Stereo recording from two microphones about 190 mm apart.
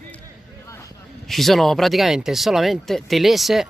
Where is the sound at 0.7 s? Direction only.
15° left (ahead or behind).